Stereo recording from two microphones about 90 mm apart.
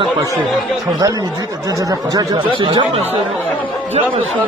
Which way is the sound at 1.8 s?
40° right (ahead or behind).